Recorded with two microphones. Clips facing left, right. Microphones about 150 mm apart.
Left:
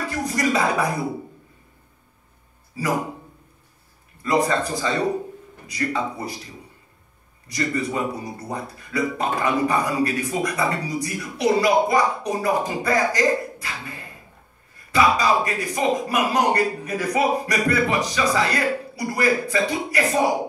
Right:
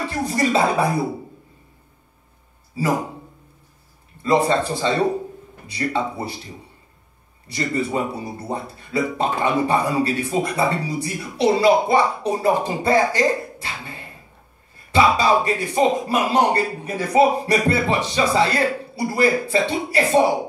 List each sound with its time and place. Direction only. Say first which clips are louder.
0.0 s a sound: right 2 dB; 30° right (ahead or behind)
2.8 s speech: right 4 dB; 30° right (ahead or behind)
4.2 s speech: right 3 dB; 30° right (ahead or behind)